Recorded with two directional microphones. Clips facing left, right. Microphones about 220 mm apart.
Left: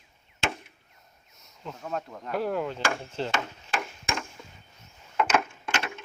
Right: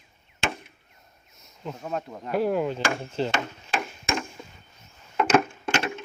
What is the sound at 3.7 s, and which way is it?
Chop, 20° right (ahead or behind).